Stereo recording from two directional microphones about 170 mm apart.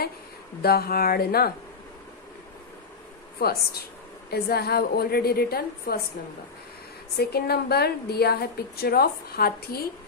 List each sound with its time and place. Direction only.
0.6 s a woman's voice: 65° left (ahead or behind)
3.3 s a woman's voice: 65° left (ahead or behind)
7.2 s a woman's voice: 70° left (ahead or behind)